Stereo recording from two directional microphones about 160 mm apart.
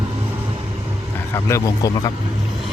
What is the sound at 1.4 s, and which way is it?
Speech, 20° left (ahead or behind).